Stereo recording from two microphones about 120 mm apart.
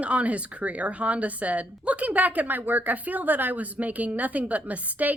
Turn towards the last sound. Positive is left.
turn(degrees=-15)  # may be behind; listen again after turning